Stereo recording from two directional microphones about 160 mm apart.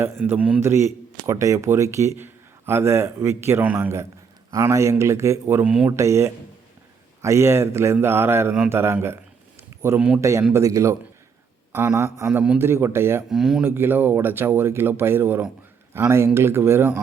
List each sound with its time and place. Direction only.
0.3 s a man's voice: 10° right (ahead or behind)
13.3 s speech: 5° right (ahead or behind)
13.7 s a man's voice: 15° right (ahead or behind)